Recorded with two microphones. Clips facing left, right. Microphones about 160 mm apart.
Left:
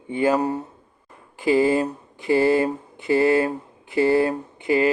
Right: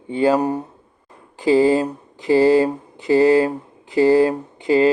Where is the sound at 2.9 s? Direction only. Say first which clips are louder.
Right 4 dB; 20° right (ahead or behind).